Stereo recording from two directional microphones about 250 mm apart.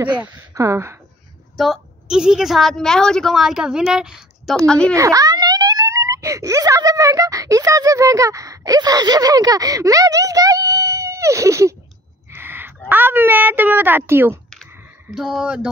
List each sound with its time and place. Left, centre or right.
0.1 s a woman's voice: centre
4.9 s a woman's voice: centre
14.7 s a sound: centre